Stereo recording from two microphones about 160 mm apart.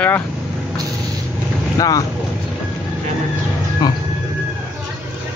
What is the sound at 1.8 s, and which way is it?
Speech, 20° left (ahead or behind).